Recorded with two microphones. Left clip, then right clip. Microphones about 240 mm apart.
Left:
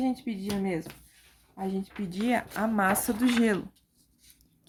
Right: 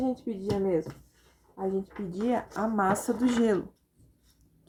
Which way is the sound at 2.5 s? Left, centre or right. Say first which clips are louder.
Even; left.